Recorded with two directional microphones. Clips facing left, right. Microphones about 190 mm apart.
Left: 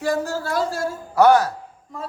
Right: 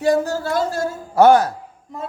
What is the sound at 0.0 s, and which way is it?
A man's voice, 20° right (ahead or behind).